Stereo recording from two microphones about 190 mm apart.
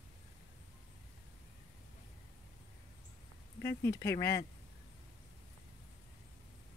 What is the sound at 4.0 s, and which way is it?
Speech, 15° left (ahead or behind).